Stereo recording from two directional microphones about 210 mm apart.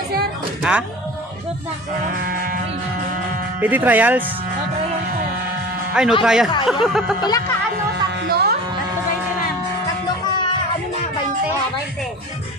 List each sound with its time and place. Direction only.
0.6 s music: 5° right (ahead or behind)
2.2 s a sound: 45° right (ahead or behind)
3.6 s speech: 10° right (ahead or behind)
5.9 s speech: 5° right (ahead or behind)
7.2 s speech: 20° left (ahead or behind)
8.3 s music: 50° right (ahead or behind)